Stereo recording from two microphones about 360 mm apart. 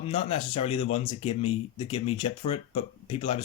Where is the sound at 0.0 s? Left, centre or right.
Centre.